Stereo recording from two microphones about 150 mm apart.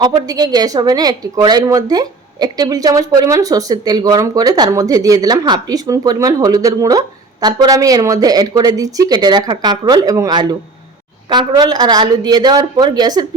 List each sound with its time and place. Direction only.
0.0 s a woman's voice: 30° right (ahead or behind)